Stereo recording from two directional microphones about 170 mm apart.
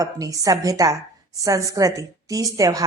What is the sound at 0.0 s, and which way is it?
A woman's voice, 20° right (ahead or behind).